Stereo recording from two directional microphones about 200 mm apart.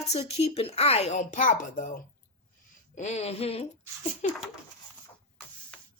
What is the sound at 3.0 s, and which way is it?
Speech, 35° left (ahead or behind).